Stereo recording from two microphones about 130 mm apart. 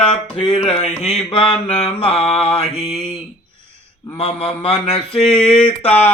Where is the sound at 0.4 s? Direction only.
45° left (ahead or behind).